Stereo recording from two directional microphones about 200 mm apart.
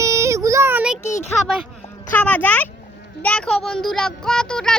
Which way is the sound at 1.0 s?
35° left (ahead or behind).